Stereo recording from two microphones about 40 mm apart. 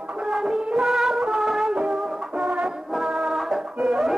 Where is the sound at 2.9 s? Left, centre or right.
Centre.